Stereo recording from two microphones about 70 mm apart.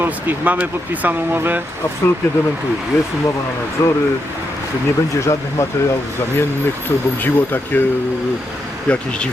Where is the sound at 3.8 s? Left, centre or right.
Left.